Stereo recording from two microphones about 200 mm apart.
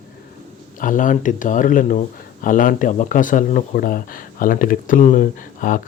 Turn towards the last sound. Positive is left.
turn(degrees=40)  # may be behind; listen again after turning